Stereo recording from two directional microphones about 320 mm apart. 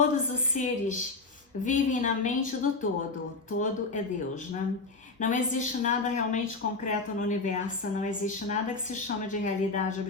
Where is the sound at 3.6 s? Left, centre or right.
Left.